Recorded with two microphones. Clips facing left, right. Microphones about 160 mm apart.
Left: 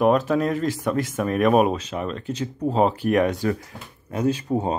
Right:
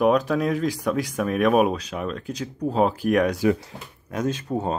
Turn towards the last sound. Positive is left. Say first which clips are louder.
# left 3 dB
turn(degrees=10)  # may be behind; listen again after turning